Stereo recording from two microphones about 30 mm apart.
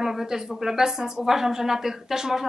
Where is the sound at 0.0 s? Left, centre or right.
Centre.